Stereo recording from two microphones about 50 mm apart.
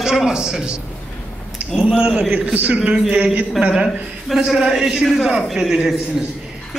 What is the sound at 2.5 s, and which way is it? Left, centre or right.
Speech, right.